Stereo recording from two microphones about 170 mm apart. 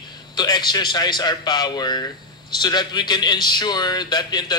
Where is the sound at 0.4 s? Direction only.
25° left (ahead or behind).